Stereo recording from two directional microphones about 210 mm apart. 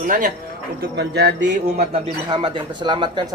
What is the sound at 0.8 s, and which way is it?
Speech, 50° right (ahead or behind).